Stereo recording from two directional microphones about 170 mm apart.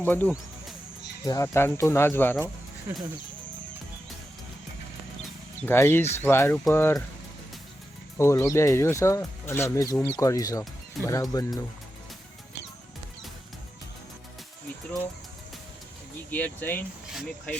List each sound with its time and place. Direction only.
0.0 s speech: 10° left (ahead or behind)
5.6 s speech: 15° left (ahead or behind)
8.2 s speech: 15° left (ahead or behind)
16.3 s speech: 10° left (ahead or behind)
17.1 s speech: centre (ahead or behind)